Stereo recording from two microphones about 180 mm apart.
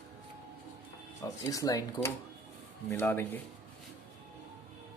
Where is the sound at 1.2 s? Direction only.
20° left (ahead or behind).